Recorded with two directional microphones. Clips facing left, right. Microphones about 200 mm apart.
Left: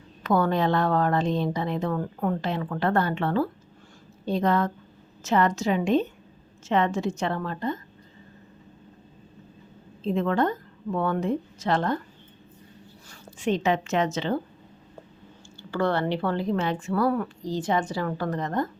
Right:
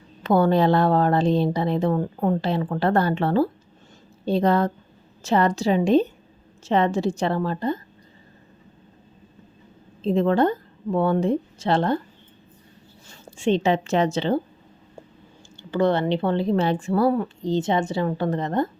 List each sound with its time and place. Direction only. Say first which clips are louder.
0.2 s speech: right 5 dB; 30° right (ahead or behind)
10.0 s speech: right 5 dB; 30° right (ahead or behind)
13.1 s speech: right 4 dB; 25° right (ahead or behind)
15.7 s a woman's voice: right 4 dB; 20° right (ahead or behind)